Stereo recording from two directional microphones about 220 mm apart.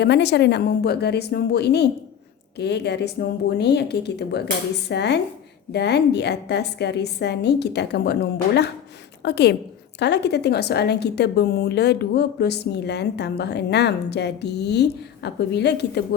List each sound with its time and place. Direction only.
0.0 s a woman's voice: 50° left (ahead or behind)